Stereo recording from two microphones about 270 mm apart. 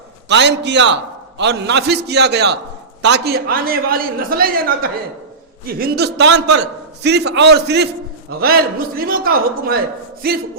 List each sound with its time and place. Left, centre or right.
0.3 s a man's voice: right